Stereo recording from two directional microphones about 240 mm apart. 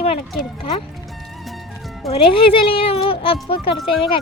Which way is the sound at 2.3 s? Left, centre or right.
Left.